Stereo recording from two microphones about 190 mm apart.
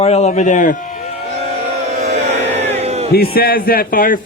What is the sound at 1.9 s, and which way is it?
Music, 35° right (ahead or behind).